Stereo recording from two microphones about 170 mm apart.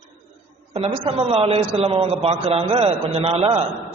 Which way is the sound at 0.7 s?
35° right (ahead or behind).